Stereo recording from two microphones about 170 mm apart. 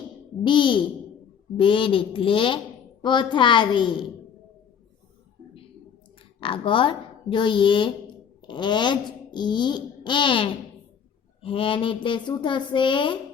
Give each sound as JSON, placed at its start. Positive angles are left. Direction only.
{"t": 0.4, "sound": "a child's voice", "side_deg": 30}
{"t": 6.4, "sound": "a child's voice", "side_deg": 30}